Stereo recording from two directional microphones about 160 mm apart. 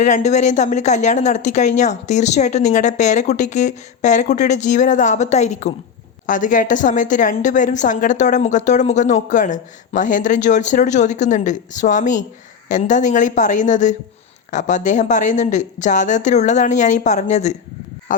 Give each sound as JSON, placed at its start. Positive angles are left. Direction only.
{"t": 0.0, "sound": "a woman's voice", "side_deg": 45}